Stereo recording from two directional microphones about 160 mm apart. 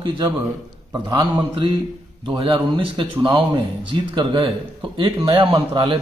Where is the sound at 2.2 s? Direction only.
30° right (ahead or behind).